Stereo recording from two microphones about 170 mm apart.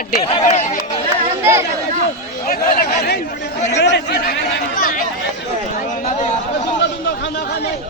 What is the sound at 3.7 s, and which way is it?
Speech, 90° left.